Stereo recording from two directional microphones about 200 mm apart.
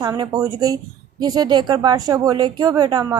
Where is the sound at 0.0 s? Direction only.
20° right (ahead or behind).